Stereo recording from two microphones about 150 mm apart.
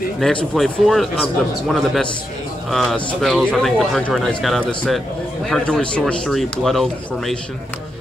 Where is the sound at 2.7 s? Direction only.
Centre (ahead or behind).